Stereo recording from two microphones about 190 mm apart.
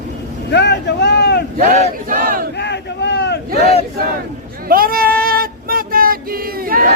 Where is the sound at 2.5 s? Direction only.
65° left (ahead or behind).